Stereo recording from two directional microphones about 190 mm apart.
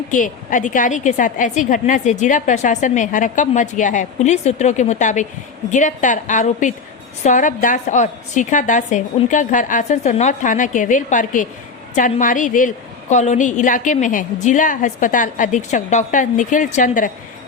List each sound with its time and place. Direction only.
0.1 s a woman's voice: 45° left (ahead or behind)